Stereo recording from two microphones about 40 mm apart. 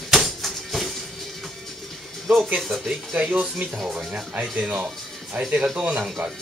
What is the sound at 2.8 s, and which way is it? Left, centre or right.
Speech, right.